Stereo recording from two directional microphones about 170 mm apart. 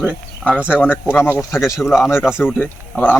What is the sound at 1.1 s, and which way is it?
Speech, 15° left (ahead or behind).